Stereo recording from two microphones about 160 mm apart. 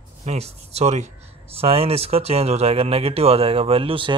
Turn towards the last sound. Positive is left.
turn(degrees=-35)  # may be behind; listen again after turning